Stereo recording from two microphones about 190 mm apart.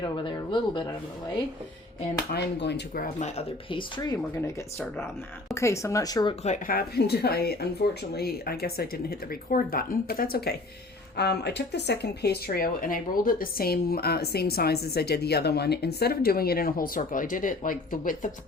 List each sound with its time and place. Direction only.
0.0 s speech: 25° left (ahead or behind)
2.3 s speech: 60° left (ahead or behind); by 6.3 s 20° left (ahead or behind)
6.4 s speech: 45° left (ahead or behind)